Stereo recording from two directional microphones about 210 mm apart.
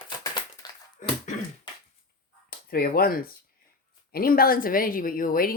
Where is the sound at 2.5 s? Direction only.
45° left (ahead or behind).